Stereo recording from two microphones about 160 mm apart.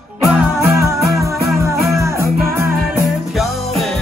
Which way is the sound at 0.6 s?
15° right (ahead or behind).